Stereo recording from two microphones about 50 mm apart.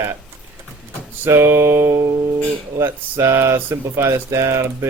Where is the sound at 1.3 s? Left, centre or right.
Right.